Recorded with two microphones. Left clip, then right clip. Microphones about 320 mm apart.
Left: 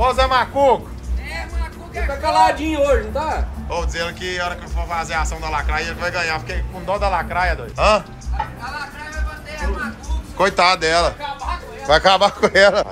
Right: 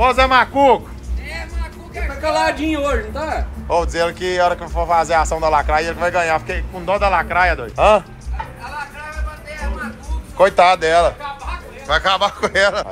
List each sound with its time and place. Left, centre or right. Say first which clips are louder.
0.0 s speech: right 3 dB; centre
2.0 s speech: left 3 dB; centre
2.7 s a man's voice: left 3 dB; centre
3.6 s speech: right 8 dB; centre
10.3 s speech: right 4 dB; centre
11.9 s a man's voice: left 3 dB; centre